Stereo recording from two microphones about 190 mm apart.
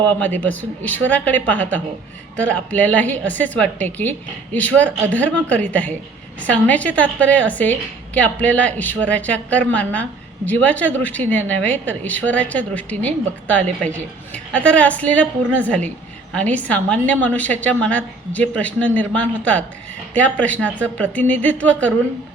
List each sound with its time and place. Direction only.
0.1 s a woman's voice: 10° left (ahead or behind)